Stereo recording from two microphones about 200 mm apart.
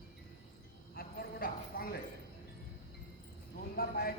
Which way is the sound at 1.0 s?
50° left (ahead or behind).